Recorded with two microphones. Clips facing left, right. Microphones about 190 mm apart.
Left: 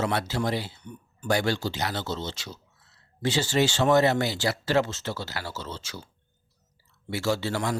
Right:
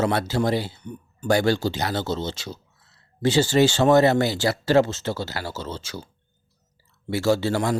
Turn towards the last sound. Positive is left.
turn(degrees=-35)  # may be behind; listen again after turning